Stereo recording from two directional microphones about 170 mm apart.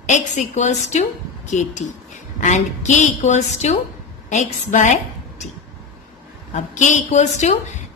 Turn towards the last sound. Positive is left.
turn(degrees=45)  # may be behind; listen again after turning